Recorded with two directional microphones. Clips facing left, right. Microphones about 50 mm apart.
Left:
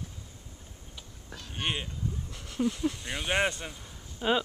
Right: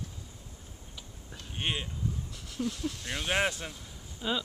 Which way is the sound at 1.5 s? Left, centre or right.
Centre.